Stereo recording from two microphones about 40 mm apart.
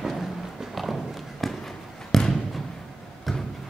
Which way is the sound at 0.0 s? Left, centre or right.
Centre.